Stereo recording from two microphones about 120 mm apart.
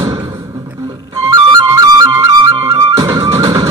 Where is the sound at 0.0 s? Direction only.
30° right (ahead or behind).